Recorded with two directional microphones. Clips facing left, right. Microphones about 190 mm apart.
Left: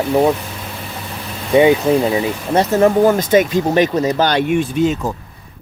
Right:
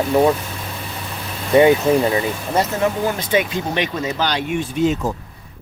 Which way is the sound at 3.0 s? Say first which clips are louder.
Left 7 dB; 45° left (ahead or behind).